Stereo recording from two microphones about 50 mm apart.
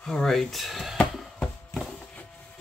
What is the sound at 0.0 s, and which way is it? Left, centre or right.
Speech, centre.